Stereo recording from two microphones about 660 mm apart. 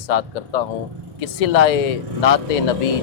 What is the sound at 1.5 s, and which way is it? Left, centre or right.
Speech, left.